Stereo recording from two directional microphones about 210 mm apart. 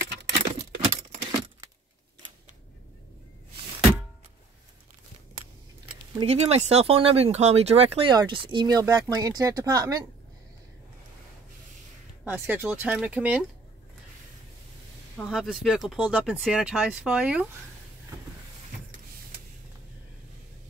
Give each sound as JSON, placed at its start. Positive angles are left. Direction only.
{"t": 0.7, "sound": "keys jangling", "side_deg": -25}
{"t": 6.1, "sound": "speech", "side_deg": -30}
{"t": 12.3, "sound": "speech", "side_deg": -10}
{"t": 15.1, "sound": "speech", "side_deg": 0}